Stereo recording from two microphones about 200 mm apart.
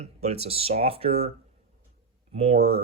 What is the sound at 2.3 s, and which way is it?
Speech, 30° right (ahead or behind).